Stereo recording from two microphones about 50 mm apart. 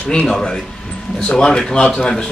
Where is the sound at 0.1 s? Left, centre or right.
Centre.